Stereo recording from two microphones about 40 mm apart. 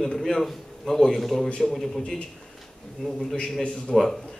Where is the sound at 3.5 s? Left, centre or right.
Centre.